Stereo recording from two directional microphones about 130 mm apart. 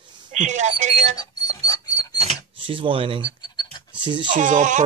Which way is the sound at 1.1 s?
30° left (ahead or behind).